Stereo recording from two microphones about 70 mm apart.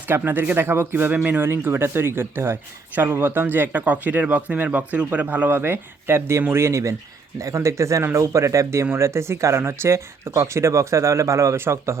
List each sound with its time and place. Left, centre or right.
0.1 s speech: right